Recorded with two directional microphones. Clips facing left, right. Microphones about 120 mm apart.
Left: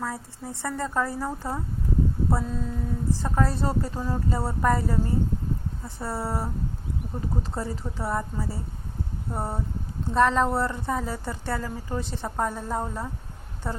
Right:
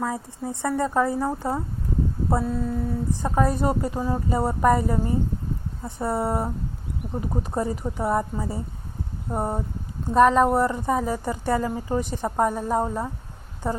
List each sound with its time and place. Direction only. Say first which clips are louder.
0.0 s speech: right 5 dB; 15° right (ahead or behind)
2.4 s a woman's voice: right 5 dB; 10° right (ahead or behind)